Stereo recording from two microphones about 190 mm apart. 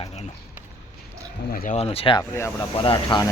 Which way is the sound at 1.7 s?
30° left (ahead or behind).